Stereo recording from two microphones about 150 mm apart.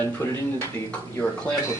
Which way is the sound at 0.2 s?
15° left (ahead or behind).